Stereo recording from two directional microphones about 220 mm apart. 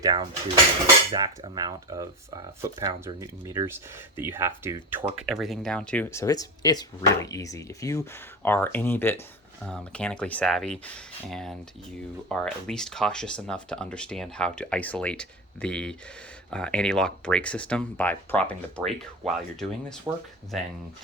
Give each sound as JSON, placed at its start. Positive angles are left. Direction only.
{"t": 0.0, "sound": "speech", "side_deg": -20}